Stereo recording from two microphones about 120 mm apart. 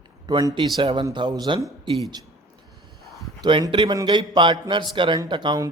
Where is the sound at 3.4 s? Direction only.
40° right (ahead or behind).